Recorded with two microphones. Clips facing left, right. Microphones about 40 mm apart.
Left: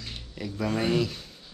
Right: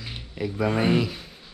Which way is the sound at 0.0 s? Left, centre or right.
Centre.